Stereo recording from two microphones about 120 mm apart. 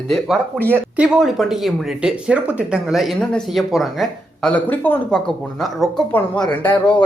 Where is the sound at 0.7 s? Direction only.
10° right (ahead or behind); by 5.0 s 15° left (ahead or behind).